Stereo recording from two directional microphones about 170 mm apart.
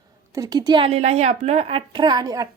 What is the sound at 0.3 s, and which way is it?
A woman's voice, 20° right (ahead or behind).